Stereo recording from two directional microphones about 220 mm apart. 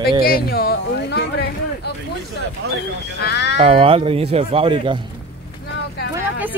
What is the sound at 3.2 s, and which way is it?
Speech, 50° left (ahead or behind).